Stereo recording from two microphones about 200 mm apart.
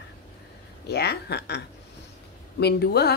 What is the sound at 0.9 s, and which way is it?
Speech, 55° left (ahead or behind).